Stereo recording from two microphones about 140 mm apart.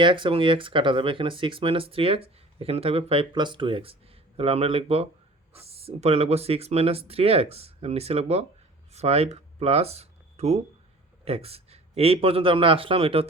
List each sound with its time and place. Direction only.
0.0 s speech: 35° right (ahead or behind)